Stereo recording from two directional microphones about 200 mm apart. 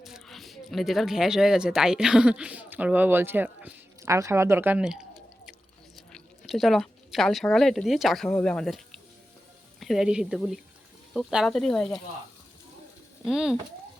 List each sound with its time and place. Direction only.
0.0 s speech: centre (ahead or behind)
6.1 s speech: centre (ahead or behind)
13.2 s speech: centre (ahead or behind)